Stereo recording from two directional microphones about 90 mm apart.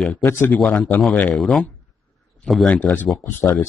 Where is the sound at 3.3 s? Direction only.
25° left (ahead or behind).